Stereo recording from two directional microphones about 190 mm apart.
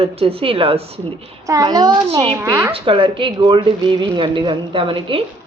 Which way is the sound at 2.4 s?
15° right (ahead or behind).